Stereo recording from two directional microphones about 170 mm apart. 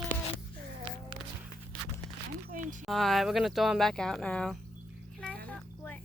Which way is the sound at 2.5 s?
50° right (ahead or behind).